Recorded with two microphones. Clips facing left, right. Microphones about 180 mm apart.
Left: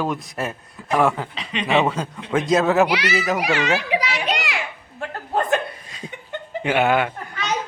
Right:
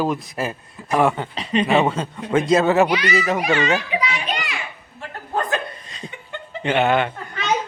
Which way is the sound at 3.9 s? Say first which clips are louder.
Left 2 dB; 75° left (ahead or behind).